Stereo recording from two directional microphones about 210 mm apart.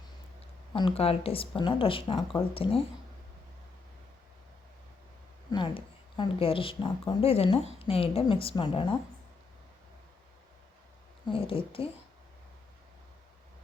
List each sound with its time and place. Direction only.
0.7 s a woman's voice: 25° left (ahead or behind)
5.5 s a woman's voice: 25° left (ahead or behind)
11.3 s a woman's voice: 25° left (ahead or behind)